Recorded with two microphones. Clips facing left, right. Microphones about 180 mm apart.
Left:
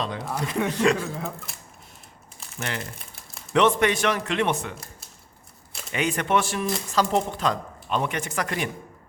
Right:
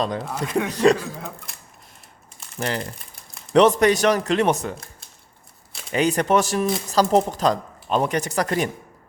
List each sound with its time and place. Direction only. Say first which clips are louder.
0.3 s speech: right 2 dB; centre (ahead or behind)
0.7 s speech: right 5 dB; 35° right (ahead or behind)
0.9 s speech: left 2 dB; centre (ahead or behind)
2.6 s speech: right 6 dB; 35° right (ahead or behind)
5.9 s speech: right 5 dB; 35° right (ahead or behind)